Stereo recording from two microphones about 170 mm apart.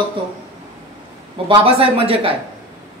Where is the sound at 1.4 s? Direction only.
35° right (ahead or behind).